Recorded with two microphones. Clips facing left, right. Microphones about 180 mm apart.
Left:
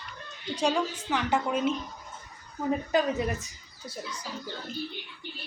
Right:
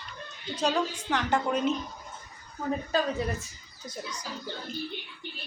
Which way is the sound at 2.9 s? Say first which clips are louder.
Left 2 dB; 20° left (ahead or behind).